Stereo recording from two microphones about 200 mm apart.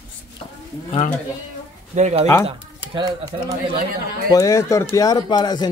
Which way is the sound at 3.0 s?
20° right (ahead or behind).